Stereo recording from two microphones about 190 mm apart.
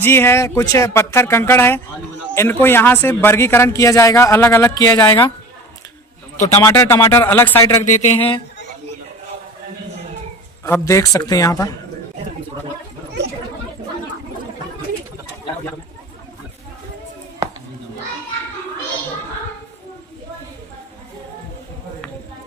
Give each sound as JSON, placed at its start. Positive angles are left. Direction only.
{"t": 0.0, "sound": "speech", "side_deg": 10}
{"t": 6.6, "sound": "speech", "side_deg": 15}
{"t": 7.9, "sound": "a sound", "side_deg": 40}
{"t": 10.6, "sound": "speech", "side_deg": 15}